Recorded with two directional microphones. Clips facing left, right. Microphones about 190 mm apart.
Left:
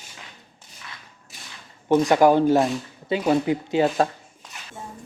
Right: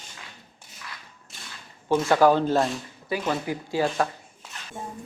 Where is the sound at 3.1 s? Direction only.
25° left (ahead or behind).